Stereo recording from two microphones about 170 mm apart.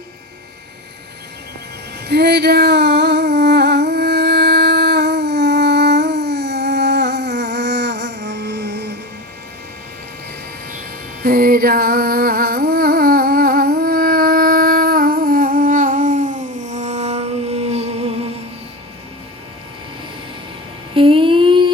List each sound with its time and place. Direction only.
2.0 s a sound: 75° right (ahead or behind)
11.2 s music: 60° right (ahead or behind); by 18.3 s 35° right (ahead or behind)
20.9 s humming: 30° right (ahead or behind)